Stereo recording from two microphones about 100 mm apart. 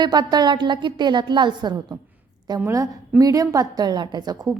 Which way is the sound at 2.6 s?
35° right (ahead or behind).